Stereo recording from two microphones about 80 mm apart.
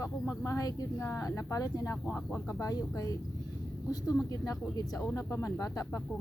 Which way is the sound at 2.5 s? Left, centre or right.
Left.